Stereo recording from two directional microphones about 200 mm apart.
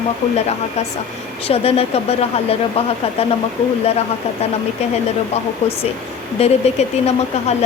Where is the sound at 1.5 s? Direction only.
30° left (ahead or behind).